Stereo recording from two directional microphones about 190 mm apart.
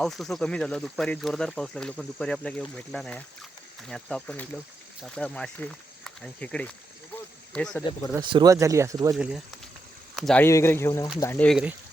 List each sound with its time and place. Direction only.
0.0 s speech: centre (ahead or behind)
8.1 s speech: 25° right (ahead or behind)
9.1 s speech: centre (ahead or behind)